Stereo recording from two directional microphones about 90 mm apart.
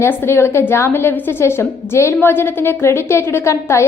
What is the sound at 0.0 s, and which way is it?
A woman's voice, 25° left (ahead or behind).